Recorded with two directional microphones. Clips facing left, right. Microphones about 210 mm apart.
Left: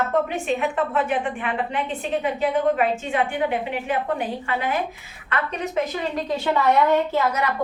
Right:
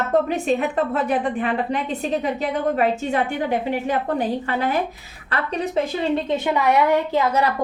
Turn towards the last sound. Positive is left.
turn(degrees=-15)  # may be behind; listen again after turning